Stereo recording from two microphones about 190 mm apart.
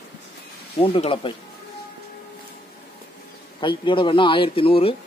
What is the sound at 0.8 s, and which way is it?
Speech, 30° left (ahead or behind).